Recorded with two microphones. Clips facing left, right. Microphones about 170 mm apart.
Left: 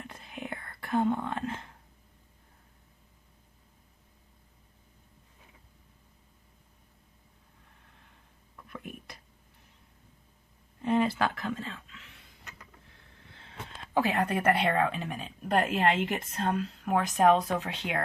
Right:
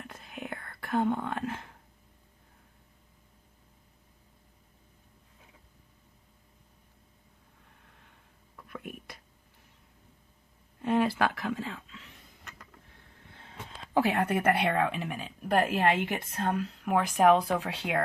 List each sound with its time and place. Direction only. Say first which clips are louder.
0.0 s whispering: even; centre (ahead or behind)
8.5 s a sound: right 1 dB; 5° right (ahead or behind)
10.8 s speech: even; 5° right (ahead or behind)
14.2 s speech: even; 10° right (ahead or behind)